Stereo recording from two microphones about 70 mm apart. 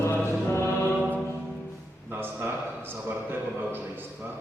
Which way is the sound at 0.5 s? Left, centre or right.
Left.